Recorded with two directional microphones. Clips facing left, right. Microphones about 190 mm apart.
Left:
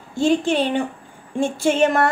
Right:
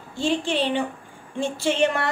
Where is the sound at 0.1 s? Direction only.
45° left (ahead or behind).